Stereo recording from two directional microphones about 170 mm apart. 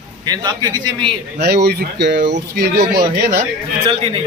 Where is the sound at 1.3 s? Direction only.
75° right (ahead or behind).